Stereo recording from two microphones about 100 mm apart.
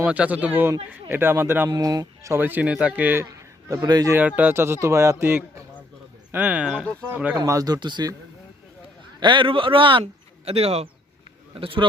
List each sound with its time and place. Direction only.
0.0 s a man's voice: 15° right (ahead or behind)
1.7 s speech: 40° right (ahead or behind)
2.3 s speech: 20° right (ahead or behind)
3.2 s a man's voice: 35° right (ahead or behind)
4.1 s a man's voice: 15° right (ahead or behind)
6.3 s speech: 15° right (ahead or behind)
7.3 s speech: 35° right (ahead or behind)
9.2 s speech: 55° right (ahead or behind); by 10.8 s 90° right
11.5 s speech: 65° right (ahead or behind)